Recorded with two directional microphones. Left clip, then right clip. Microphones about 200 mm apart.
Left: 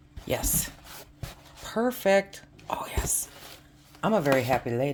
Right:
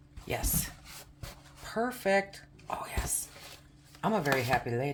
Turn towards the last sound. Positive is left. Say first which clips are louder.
# left 4 dB
turn(degrees=50)  # may be behind; listen again after turning